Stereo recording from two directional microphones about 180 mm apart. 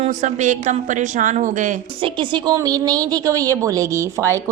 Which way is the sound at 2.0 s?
25° right (ahead or behind).